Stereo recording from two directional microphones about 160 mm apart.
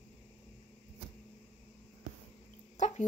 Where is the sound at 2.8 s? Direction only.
50° left (ahead or behind).